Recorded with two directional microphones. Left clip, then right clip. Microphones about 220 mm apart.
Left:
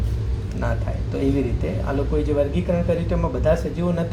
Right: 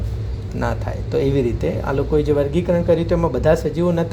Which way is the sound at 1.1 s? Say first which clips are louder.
Right 5 dB; 50° right (ahead or behind).